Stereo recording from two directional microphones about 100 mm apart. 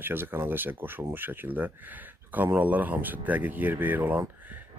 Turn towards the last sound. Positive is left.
turn(degrees=-20)  # may be behind; listen again after turning